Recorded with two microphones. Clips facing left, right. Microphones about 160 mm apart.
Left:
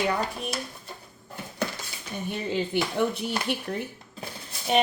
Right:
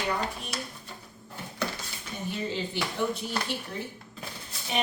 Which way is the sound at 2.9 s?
60° left (ahead or behind).